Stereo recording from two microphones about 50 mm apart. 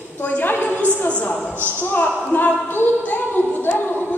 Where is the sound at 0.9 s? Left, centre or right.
Left.